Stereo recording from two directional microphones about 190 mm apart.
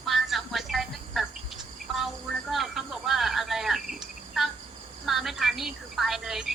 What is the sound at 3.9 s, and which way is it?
Cricket, centre (ahead or behind).